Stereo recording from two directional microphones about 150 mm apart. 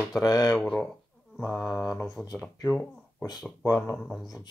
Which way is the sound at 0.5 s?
5° left (ahead or behind).